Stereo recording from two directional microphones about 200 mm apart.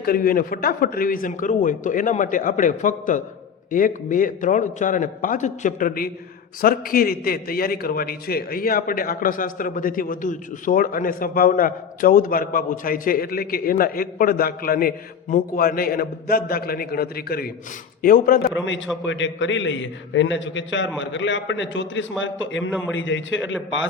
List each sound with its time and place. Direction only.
0.0 s a man's voice: 45° left (ahead or behind)
19.0 s a man's voice: 70° left (ahead or behind)